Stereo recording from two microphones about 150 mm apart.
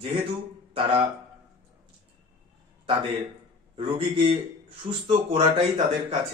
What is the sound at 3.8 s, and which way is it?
A man's voice, 40° right (ahead or behind).